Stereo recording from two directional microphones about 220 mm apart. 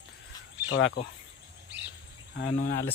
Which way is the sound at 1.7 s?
50° right (ahead or behind).